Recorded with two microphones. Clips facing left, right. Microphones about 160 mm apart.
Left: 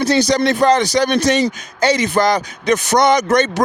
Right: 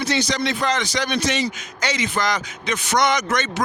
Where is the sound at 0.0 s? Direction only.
35° left (ahead or behind).